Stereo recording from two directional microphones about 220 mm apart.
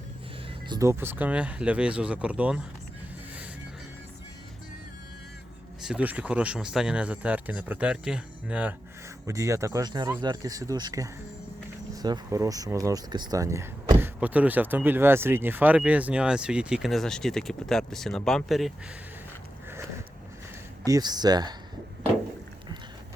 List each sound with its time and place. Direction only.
0.7 s speech: 15° right (ahead or behind)
5.8 s speech: 5° right (ahead or behind)
20.8 s speech: 15° right (ahead or behind)